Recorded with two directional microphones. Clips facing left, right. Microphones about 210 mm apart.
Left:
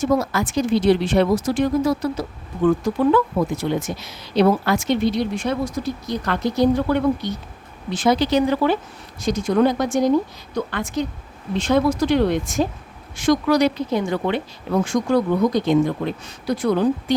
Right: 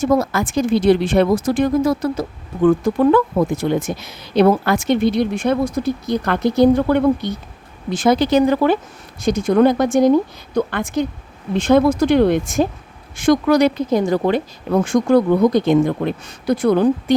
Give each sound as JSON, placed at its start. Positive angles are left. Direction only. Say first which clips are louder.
{"t": 0.0, "sound": "speech", "louder": "right 3 dB", "side_deg": -50}
{"t": 14.0, "sound": "speech", "louder": "right 5 dB", "side_deg": -40}